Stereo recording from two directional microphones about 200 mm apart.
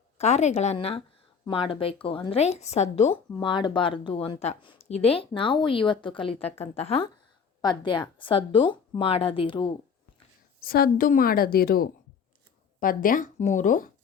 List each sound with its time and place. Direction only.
0.2 s a woman's voice: 35° left (ahead or behind)
10.6 s a woman's voice: 50° left (ahead or behind)